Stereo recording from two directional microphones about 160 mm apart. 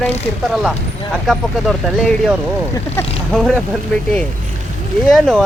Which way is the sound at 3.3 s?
Centre (ahead or behind).